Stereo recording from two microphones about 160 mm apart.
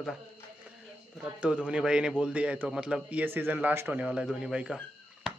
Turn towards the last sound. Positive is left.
turn(degrees=-5)  # may be behind; listen again after turning